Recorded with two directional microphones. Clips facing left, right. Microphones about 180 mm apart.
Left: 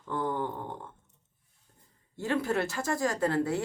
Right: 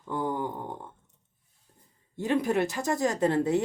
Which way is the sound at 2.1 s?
20° right (ahead or behind).